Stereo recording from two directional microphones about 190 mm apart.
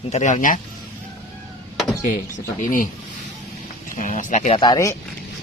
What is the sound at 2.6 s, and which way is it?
Speech, 45° left (ahead or behind).